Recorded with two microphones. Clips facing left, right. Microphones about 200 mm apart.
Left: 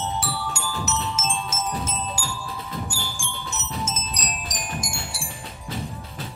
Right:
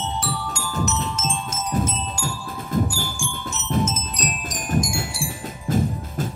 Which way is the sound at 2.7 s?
50° right (ahead or behind).